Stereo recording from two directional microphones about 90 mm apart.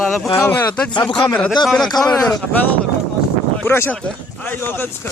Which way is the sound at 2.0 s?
50° left (ahead or behind).